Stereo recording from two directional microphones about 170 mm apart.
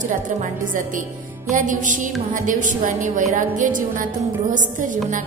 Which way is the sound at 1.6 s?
50° right (ahead or behind).